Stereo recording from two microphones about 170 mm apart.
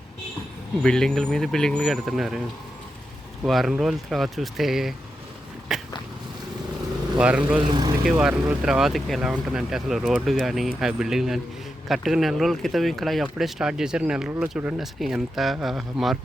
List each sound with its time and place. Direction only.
0.8 s speech: 5° left (ahead or behind)
3.4 s speech: centre (ahead or behind)
5.7 s a sound: 5° right (ahead or behind)
7.2 s speech: 5° right (ahead or behind)
7.7 s speech: 25° right (ahead or behind)
8.0 s speech: 5° right (ahead or behind)